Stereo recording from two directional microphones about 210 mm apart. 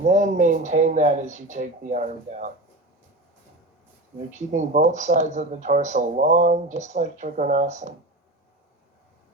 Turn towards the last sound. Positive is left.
turn(degrees=-35)  # may be behind; listen again after turning